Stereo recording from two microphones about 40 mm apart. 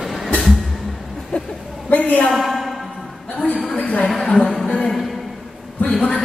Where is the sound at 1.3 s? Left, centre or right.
Left.